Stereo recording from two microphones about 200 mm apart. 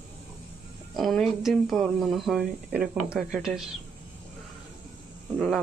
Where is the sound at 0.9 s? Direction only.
Centre (ahead or behind).